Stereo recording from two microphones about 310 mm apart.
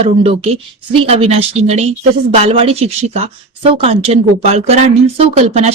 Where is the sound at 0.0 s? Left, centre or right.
Centre.